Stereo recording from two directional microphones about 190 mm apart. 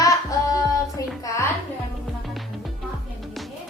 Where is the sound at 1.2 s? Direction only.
15° left (ahead or behind).